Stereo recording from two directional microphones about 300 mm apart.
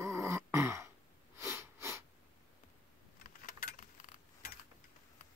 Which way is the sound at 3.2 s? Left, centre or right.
Left.